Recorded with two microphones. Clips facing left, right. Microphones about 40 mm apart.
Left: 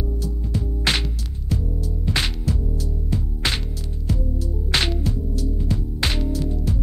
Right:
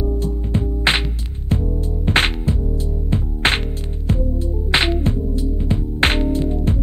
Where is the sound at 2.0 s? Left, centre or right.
Right.